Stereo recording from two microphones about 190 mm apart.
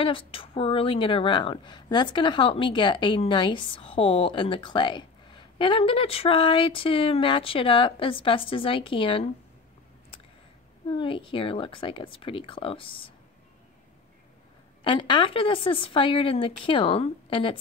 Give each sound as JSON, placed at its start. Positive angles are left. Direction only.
{"t": 0.0, "sound": "speech", "side_deg": 30}
{"t": 11.0, "sound": "speech", "side_deg": 25}
{"t": 14.8, "sound": "speech", "side_deg": 25}